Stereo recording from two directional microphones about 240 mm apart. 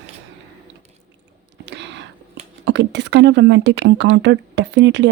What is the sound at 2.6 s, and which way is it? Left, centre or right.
Speech, right.